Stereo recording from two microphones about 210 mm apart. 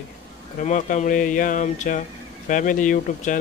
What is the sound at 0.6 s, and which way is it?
Speech, 40° left (ahead or behind).